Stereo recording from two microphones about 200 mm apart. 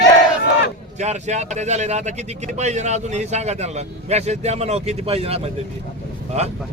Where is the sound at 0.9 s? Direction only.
35° right (ahead or behind).